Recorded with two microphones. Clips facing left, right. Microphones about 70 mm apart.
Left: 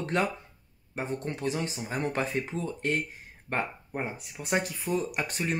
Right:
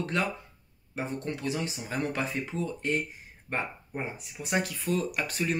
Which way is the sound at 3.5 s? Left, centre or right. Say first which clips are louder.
Left 2 dB; left.